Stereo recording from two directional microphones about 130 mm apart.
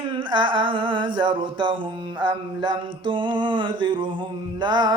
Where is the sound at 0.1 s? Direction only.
40° right (ahead or behind).